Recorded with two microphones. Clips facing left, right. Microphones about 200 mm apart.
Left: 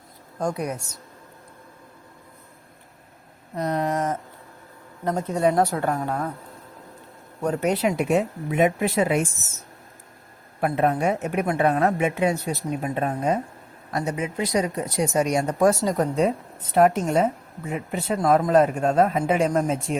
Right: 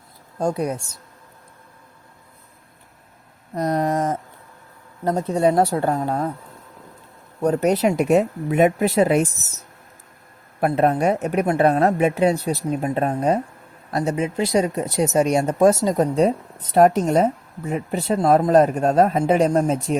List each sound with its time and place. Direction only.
0.3 s speech: 30° right (ahead or behind)
3.5 s speech: 40° right (ahead or behind)
7.4 s speech: 40° right (ahead or behind)
10.7 s speech: 40° right (ahead or behind)